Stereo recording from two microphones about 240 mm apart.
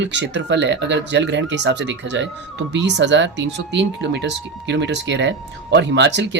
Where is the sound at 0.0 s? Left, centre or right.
Right.